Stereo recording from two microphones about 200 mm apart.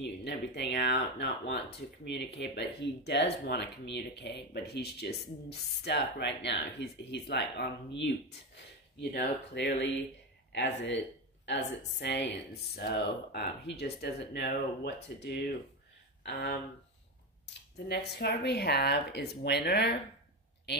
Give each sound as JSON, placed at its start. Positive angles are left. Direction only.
{"t": 0.0, "sound": "speech", "side_deg": 55}
{"t": 17.8, "sound": "speech", "side_deg": 55}